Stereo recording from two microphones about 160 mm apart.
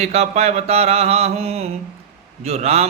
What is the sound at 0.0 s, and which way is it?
A man's voice, 40° right (ahead or behind).